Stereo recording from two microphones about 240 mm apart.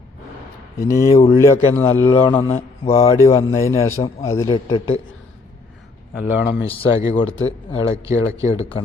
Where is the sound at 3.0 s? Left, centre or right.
Centre.